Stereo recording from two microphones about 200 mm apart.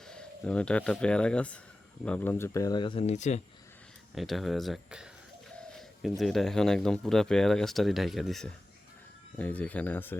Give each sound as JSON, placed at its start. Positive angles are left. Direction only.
{"t": 0.1, "sound": "speech", "side_deg": 5}
{"t": 4.1, "sound": "speech", "side_deg": 0}